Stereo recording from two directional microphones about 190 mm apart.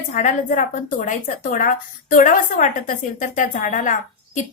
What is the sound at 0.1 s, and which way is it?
A woman's voice, 40° left (ahead or behind).